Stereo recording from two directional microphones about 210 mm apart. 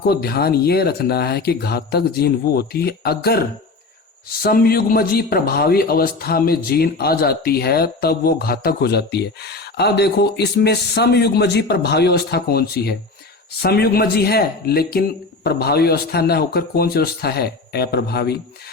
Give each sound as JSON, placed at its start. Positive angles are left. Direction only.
{"t": 0.1, "sound": "speech", "side_deg": 45}
{"t": 4.4, "sound": "speech", "side_deg": 45}